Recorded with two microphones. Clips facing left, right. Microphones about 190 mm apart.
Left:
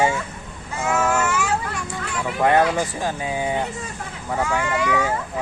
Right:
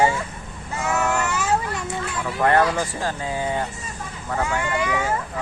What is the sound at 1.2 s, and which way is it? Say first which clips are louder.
Children playing: even; 20° right (ahead or behind).